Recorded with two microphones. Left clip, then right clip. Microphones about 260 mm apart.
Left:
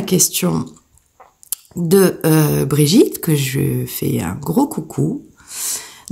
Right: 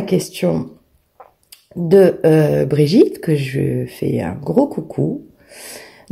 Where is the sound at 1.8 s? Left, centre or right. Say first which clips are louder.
Right 3 dB; left.